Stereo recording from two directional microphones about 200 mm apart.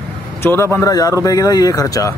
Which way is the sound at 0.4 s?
15° left (ahead or behind).